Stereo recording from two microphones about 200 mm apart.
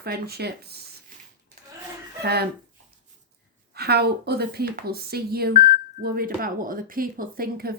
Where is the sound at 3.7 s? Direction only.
55° right (ahead or behind).